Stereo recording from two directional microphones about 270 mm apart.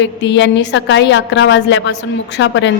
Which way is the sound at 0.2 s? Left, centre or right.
Left.